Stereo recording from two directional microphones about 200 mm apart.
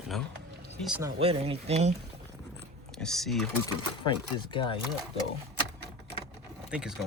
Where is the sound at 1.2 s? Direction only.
30° right (ahead or behind).